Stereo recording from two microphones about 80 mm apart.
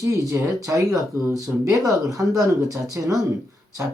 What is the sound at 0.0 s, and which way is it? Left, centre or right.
Speech, right.